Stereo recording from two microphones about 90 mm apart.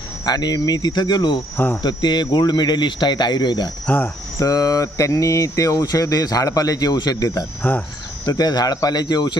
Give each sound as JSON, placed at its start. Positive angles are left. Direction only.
{"t": 0.2, "sound": "cricket", "side_deg": 50}
{"t": 1.8, "sound": "speech", "side_deg": 55}
{"t": 3.8, "sound": "speech", "side_deg": 20}
{"t": 4.4, "sound": "speech", "side_deg": 40}
{"t": 7.6, "sound": "speech", "side_deg": 20}
{"t": 8.3, "sound": "cricket", "side_deg": 45}